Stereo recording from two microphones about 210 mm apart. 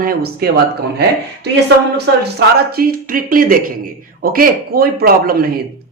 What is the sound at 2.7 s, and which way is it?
Speech, 45° right (ahead or behind).